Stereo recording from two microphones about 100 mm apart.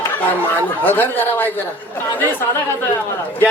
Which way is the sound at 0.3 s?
20° left (ahead or behind).